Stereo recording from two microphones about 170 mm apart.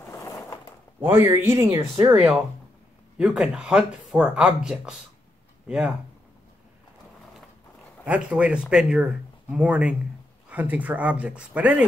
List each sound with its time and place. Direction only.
0.2 s a sound: 15° left (ahead or behind)
1.0 s speech: 15° right (ahead or behind)
2.0 s speech: 5° right (ahead or behind)
8.0 s speech: 5° right (ahead or behind)